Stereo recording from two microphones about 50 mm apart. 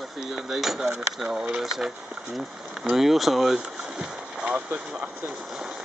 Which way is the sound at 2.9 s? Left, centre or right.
Centre.